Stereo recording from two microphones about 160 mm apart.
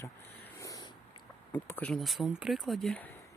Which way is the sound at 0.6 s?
20° left (ahead or behind).